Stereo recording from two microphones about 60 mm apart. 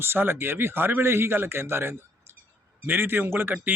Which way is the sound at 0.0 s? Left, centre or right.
Right.